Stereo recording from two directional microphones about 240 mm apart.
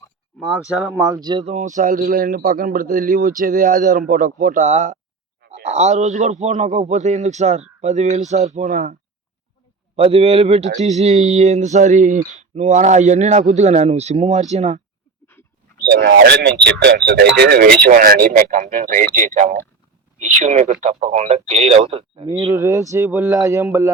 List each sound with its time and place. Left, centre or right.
0.3 s speech: centre
0.9 s a man's voice: centre
15.8 s a man's voice: right
22.3 s speech: centre